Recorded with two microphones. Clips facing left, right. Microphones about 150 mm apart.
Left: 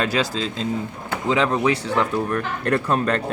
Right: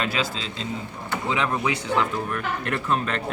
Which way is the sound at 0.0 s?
40° left (ahead or behind).